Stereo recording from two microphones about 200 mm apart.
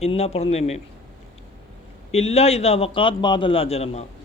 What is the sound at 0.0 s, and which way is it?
Speech, 30° left (ahead or behind).